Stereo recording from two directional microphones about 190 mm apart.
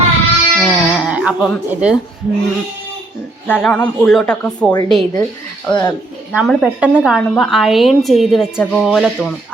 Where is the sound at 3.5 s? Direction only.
10° left (ahead or behind).